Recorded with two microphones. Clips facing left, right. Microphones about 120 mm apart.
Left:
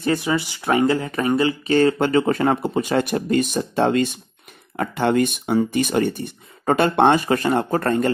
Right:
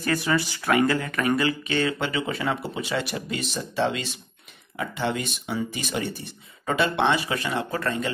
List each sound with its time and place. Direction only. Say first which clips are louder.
0.0 s speech: left 3 dB; 20° left (ahead or behind)
1.7 s speech: left 9 dB; 40° left (ahead or behind)